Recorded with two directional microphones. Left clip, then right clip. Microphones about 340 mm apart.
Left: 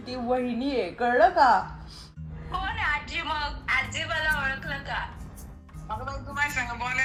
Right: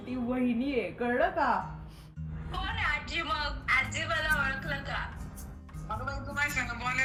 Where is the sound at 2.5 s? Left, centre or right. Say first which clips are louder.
Left 4 dB; centre.